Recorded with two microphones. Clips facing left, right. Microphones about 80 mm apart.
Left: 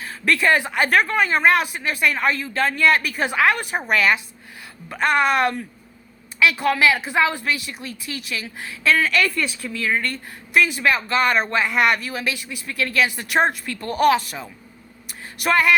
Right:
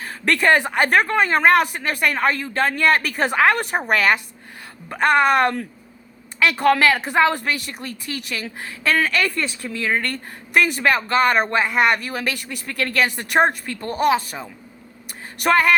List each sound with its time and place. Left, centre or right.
0.0 s speech: right
0.9 s speech: right
9.9 s speech: right
11.4 s speech: right
12.0 s speech: right
13.7 s speech: right
15.4 s speech: right